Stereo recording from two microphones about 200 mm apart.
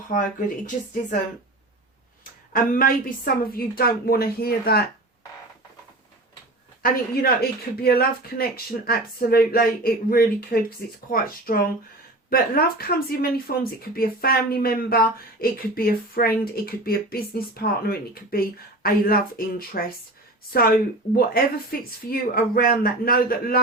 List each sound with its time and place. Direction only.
0.1 s speech: 40° left (ahead or behind)
2.5 s speech: 45° left (ahead or behind)
6.8 s speech: 50° left (ahead or behind)